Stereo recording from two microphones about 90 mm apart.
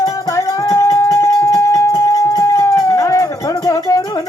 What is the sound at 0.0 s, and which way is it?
Music, 40° left (ahead or behind).